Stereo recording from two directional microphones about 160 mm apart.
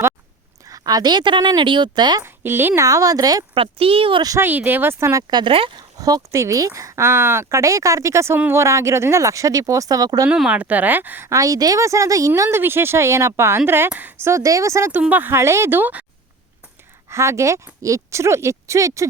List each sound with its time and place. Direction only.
0.6 s speech: 20° right (ahead or behind)
2.2 s speech: 15° right (ahead or behind); by 5.8 s 35° right (ahead or behind)
6.0 s speech: 25° right (ahead or behind)
10.2 s speech: 5° right (ahead or behind)
17.1 s speech: 15° right (ahead or behind)